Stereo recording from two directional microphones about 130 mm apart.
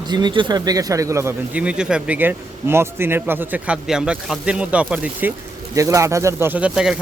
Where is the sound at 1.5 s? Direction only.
10° right (ahead or behind).